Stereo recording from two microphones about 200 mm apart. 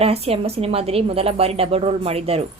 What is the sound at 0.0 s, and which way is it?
A woman's voice, 30° right (ahead or behind).